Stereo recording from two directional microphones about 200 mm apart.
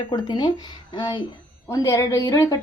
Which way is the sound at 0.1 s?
20° left (ahead or behind).